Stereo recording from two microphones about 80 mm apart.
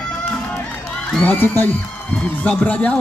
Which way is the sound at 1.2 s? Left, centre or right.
Left.